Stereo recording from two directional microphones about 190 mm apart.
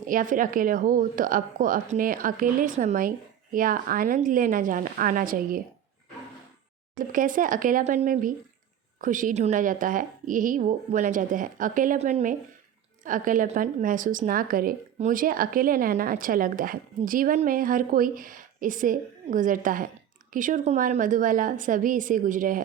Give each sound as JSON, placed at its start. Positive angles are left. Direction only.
{"t": 0.0, "sound": "a woman's voice", "side_deg": -45}
{"t": 7.1, "sound": "a woman's voice", "side_deg": -45}